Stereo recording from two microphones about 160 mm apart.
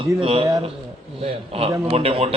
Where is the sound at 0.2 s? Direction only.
35° right (ahead or behind).